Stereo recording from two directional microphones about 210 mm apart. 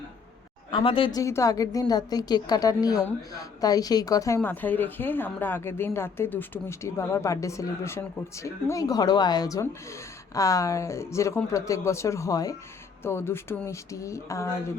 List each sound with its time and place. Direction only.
0.7 s a woman's voice: 25° left (ahead or behind)